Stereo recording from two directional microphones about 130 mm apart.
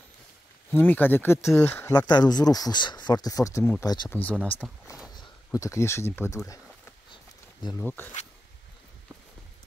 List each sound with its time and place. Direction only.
0.7 s speech: 15° left (ahead or behind)
2.0 s speech: 30° left (ahead or behind)
4.1 s speech: 10° left (ahead or behind)
4.6 s speech: centre (ahead or behind)
5.1 s speech: 25° left (ahead or behind)
7.7 s speech: 15° left (ahead or behind)